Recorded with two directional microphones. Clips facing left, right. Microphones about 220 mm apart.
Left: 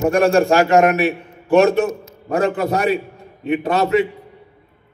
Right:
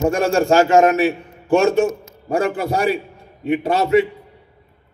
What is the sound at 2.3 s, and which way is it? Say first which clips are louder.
A man's voice: left 1 dB; 30° right (ahead or behind).